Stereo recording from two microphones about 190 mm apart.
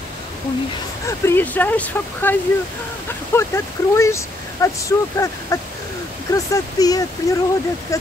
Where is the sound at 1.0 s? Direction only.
10° left (ahead or behind).